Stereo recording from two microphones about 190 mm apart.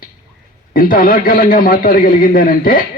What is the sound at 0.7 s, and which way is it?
A man's voice, 50° left (ahead or behind).